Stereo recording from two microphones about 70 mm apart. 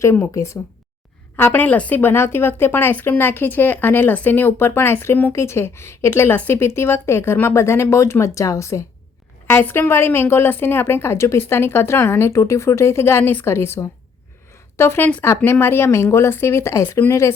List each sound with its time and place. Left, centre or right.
0.3 s speech: left
1.4 s a woman's voice: left
2.0 s a woman's voice: left
9.6 s a woman's voice: left
14.5 s a sound: left
15.4 s a woman's voice: left